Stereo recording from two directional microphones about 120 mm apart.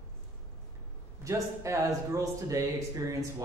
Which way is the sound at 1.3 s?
25° right (ahead or behind).